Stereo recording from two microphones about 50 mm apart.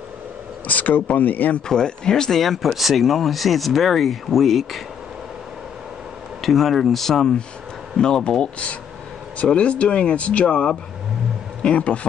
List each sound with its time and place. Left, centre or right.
0.7 s speech: left
1.7 s speech: centre
6.4 s speech: centre; by 12.1 s left